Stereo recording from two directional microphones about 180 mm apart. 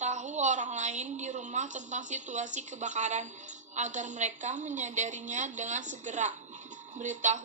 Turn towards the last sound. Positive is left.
turn(degrees=-40)  # may be behind; listen again after turning